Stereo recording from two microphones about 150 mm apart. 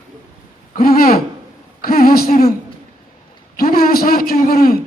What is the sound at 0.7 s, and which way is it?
A man's voice, 75° left (ahead or behind).